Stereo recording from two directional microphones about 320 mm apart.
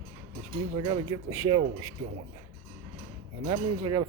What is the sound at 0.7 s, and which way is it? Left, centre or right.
Speech, centre.